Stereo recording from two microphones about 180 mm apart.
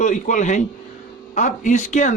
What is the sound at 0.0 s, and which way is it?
A man's voice, 45° left (ahead or behind).